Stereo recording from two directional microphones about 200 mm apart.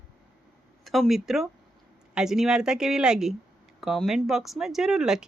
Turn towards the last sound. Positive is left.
turn(degrees=-5)  # may be behind; listen again after turning